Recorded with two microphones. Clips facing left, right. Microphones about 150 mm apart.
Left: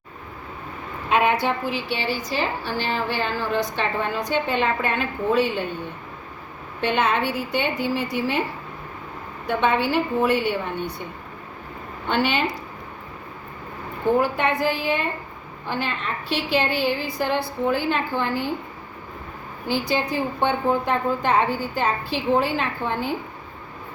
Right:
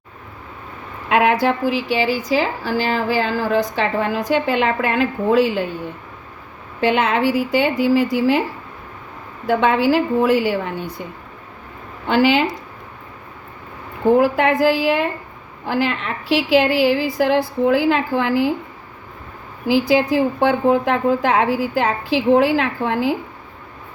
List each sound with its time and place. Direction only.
1.1 s a woman's voice: 90° right
6.8 s a woman's voice: 90° right
9.5 s a woman's voice: 90° right
12.0 s a woman's voice: 90° right
14.2 s a woman's voice: 90° right
19.6 s a woman's voice: 90° right